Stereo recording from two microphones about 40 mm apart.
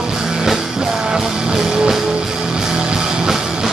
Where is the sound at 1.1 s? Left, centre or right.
Centre.